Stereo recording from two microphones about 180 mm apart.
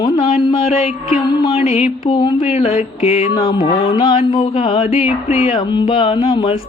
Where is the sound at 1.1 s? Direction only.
25° left (ahead or behind).